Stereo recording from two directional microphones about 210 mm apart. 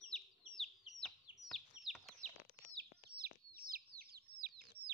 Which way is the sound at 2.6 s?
50° right (ahead or behind).